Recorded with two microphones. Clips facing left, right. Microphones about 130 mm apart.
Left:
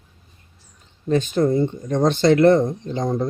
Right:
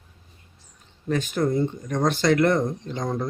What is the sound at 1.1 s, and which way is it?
Speech, 25° left (ahead or behind).